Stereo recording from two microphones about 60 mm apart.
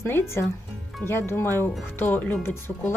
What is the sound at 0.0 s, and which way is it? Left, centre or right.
Speech, left.